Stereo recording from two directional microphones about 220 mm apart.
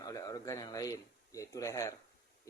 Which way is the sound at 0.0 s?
15° left (ahead or behind).